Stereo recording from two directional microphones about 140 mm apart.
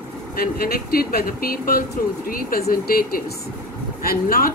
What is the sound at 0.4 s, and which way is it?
Speech, 90° left.